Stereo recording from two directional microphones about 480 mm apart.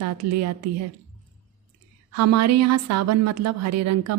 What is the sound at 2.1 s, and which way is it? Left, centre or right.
A woman's voice, right.